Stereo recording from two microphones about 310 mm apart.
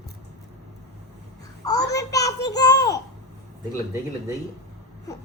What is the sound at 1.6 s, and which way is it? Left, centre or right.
A child's voice, centre.